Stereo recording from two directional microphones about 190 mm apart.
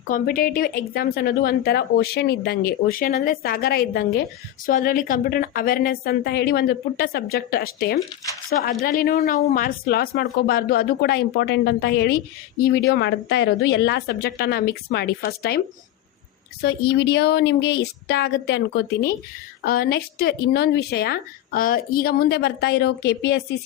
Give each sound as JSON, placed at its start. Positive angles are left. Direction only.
{"t": 0.1, "sound": "a woman's voice", "side_deg": 50}
{"t": 9.1, "sound": "a woman's voice", "side_deg": 40}